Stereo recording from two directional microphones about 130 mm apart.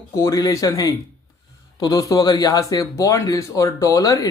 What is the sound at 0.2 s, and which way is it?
Speech, 25° left (ahead or behind).